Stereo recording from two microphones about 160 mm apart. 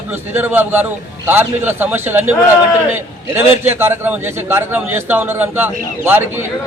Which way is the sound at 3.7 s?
15° right (ahead or behind).